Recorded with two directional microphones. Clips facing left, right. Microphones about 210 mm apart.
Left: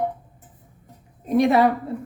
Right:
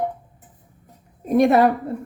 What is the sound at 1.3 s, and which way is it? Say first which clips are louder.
Speech: right 2 dB; 50° right (ahead or behind).